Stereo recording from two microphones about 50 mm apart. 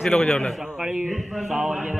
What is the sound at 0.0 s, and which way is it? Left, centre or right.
Speech, left.